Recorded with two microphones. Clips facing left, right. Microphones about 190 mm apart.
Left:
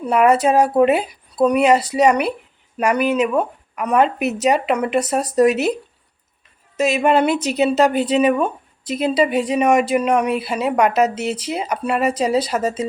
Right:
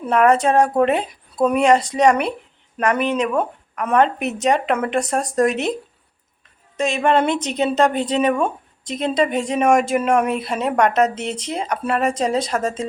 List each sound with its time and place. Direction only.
0.0 s a woman's voice: 5° left (ahead or behind)
6.7 s a woman's voice: 5° left (ahead or behind)